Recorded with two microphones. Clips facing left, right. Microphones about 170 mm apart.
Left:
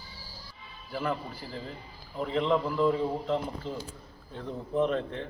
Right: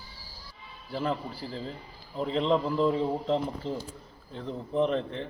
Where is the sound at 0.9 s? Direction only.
30° right (ahead or behind).